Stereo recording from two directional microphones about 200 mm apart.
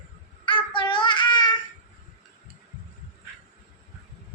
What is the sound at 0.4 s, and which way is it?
Child singing, 25° left (ahead or behind).